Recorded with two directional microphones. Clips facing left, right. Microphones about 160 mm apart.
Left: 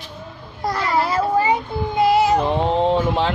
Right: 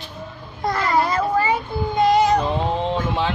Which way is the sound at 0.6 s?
Centre (ahead or behind).